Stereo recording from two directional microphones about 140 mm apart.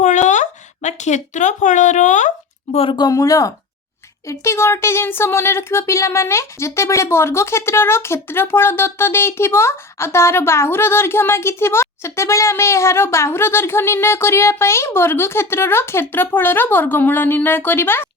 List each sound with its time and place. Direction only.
0.0 s speech: 60° left (ahead or behind)
2.7 s speech: 35° left (ahead or behind); by 18.1 s 15° left (ahead or behind)